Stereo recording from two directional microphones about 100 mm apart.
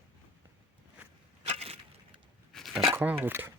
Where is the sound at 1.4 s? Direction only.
90° right.